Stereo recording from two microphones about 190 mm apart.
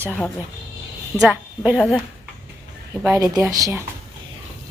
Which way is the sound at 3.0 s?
15° right (ahead or behind).